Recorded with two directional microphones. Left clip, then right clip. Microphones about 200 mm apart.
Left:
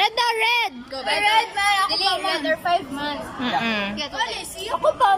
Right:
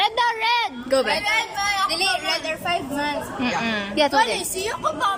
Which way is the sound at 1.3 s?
50° left (ahead or behind).